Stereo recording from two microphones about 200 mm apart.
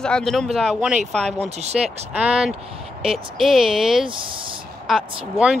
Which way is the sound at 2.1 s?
5° right (ahead or behind).